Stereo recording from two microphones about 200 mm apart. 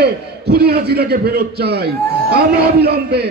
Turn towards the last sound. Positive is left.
turn(degrees=-55)  # may be behind; listen again after turning